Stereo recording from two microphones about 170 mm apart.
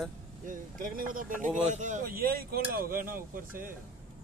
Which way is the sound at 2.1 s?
60° right (ahead or behind).